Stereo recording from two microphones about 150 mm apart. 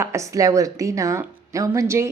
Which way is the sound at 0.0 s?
20° right (ahead or behind).